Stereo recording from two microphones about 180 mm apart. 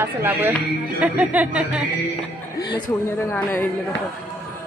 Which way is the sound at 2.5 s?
65° left (ahead or behind).